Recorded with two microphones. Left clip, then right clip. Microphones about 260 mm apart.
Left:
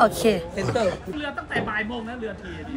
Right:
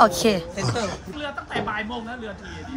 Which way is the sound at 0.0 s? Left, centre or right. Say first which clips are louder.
Right 2 dB; right.